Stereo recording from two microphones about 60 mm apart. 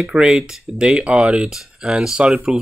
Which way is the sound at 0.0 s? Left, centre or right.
Centre.